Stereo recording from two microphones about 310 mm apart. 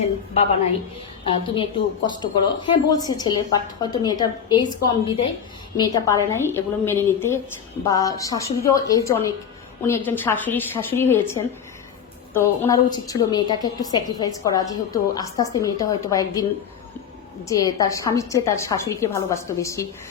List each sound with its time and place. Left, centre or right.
1.2 s a woman's voice: centre
12.3 s a woman's voice: centre
17.5 s a woman's voice: centre